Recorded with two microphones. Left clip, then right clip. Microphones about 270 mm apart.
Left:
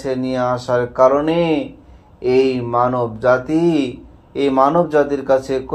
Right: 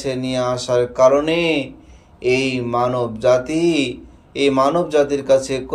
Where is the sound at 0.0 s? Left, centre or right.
Centre.